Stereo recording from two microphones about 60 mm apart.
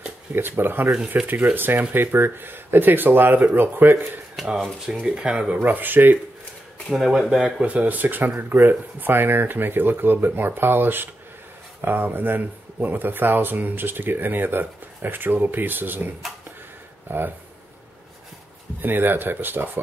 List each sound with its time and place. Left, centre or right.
0.3 s speech: right
0.9 s speech: right
4.4 s speech: centre
5.0 s speech: centre
5.6 s speech: right
6.9 s speech: centre
7.6 s speech: right
17.1 s speech: right
18.8 s speech: right